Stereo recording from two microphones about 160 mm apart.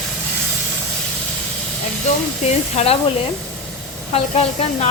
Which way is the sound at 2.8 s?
45° left (ahead or behind).